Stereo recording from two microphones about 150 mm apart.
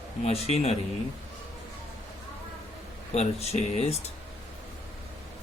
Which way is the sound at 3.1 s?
45° left (ahead or behind).